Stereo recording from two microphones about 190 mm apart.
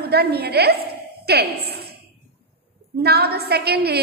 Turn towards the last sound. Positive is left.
turn(degrees=-60)  # may be behind; listen again after turning